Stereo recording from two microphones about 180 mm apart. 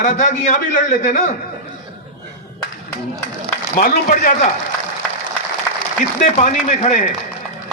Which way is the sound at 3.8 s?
50° left (ahead or behind).